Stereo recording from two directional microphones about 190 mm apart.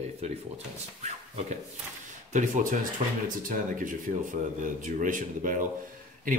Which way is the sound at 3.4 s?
45° right (ahead or behind).